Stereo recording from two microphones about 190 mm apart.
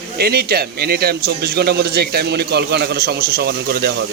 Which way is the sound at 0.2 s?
55° right (ahead or behind).